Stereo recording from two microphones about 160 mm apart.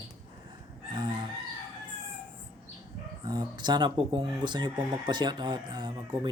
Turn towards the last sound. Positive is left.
turn(degrees=-30)  # may be behind; listen again after turning